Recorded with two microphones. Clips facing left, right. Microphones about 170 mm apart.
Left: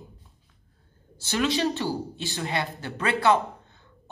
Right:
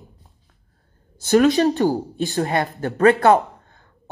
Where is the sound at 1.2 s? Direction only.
45° right (ahead or behind).